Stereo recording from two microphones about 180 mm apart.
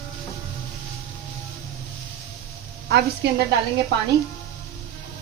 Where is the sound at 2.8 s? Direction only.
65° right (ahead or behind).